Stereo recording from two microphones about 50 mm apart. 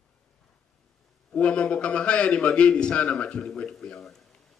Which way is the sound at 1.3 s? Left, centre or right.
Left.